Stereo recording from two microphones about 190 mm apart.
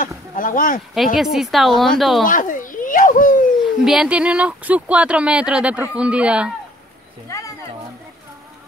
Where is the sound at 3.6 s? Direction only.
Centre (ahead or behind).